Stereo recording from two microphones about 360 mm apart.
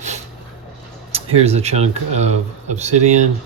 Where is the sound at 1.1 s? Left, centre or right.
Centre.